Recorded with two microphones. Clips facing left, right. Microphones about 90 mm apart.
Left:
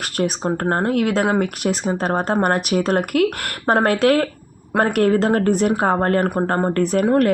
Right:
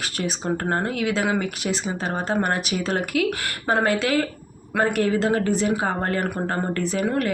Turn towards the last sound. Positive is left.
turn(degrees=55)  # may be behind; listen again after turning